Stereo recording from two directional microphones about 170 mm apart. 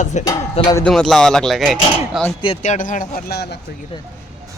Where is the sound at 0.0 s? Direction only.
45° left (ahead or behind).